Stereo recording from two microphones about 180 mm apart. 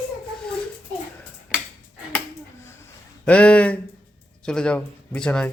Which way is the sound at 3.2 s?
5° left (ahead or behind).